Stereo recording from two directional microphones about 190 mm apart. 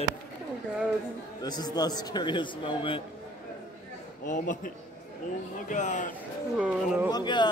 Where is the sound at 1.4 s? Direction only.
20° left (ahead or behind).